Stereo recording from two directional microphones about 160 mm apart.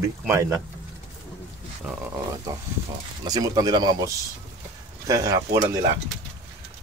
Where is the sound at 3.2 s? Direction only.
25° right (ahead or behind).